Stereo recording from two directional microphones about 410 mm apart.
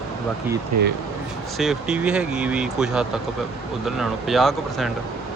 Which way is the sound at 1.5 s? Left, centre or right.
Centre.